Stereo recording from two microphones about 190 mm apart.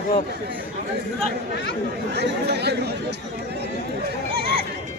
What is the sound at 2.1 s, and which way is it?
Speech, 60° right (ahead or behind).